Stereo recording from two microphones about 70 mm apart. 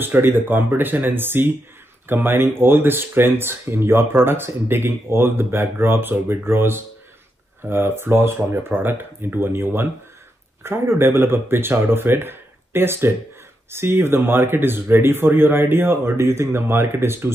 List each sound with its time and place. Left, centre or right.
0.0 s speech: right